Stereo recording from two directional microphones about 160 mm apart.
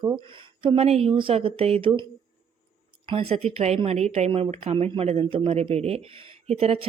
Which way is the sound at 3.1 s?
35° right (ahead or behind).